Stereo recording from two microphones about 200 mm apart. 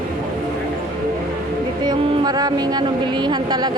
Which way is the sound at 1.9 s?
20° right (ahead or behind).